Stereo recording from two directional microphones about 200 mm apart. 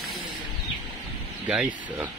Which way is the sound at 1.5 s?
5° right (ahead or behind).